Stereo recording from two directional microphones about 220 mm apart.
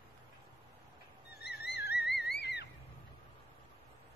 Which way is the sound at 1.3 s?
45° left (ahead or behind).